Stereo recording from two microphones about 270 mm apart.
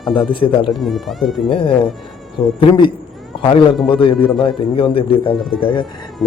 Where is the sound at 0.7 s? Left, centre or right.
Centre.